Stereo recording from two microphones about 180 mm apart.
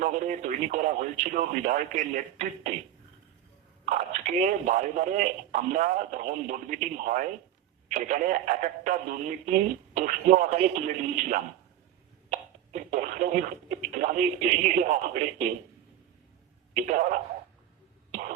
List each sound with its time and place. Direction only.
0.0 s speech: 45° right (ahead or behind)
3.8 s speech: 40° right (ahead or behind)
16.7 s speech: 45° right (ahead or behind)
18.1 s cough: 45° right (ahead or behind)